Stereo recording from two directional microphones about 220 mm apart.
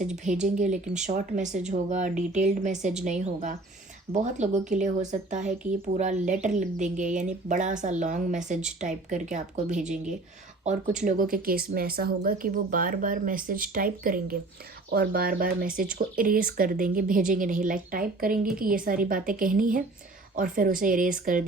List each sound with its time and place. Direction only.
0.3 s speech: 35° right (ahead or behind)